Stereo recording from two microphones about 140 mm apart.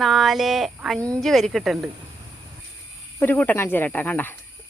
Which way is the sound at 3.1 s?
15° left (ahead or behind).